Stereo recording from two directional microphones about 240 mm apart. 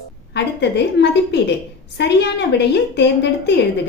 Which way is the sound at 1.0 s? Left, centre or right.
Left.